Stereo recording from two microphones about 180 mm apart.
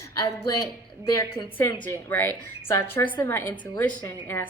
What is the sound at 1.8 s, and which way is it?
A woman's voice, 10° left (ahead or behind).